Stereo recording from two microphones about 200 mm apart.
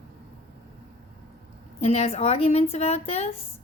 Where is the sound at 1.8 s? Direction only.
30° left (ahead or behind).